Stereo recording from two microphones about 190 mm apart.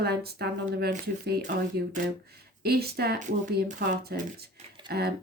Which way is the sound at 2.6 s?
55° right (ahead or behind).